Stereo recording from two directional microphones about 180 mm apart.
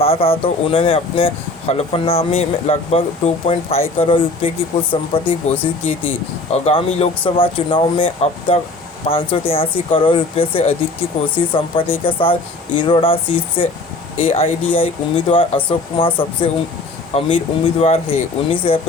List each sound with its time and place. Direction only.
0.0 s speech: 30° left (ahead or behind)